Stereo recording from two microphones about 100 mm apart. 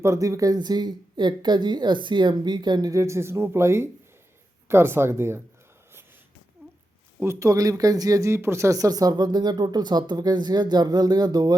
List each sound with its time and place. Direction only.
0.0 s speech: 30° right (ahead or behind)
2.9 s speech: 30° right (ahead or behind)
7.2 s speech: 30° right (ahead or behind)